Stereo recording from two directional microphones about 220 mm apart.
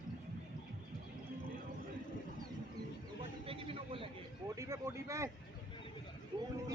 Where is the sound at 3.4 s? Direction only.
25° right (ahead or behind).